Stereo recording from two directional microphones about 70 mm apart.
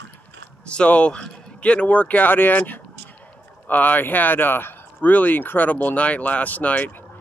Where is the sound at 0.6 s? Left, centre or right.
Centre.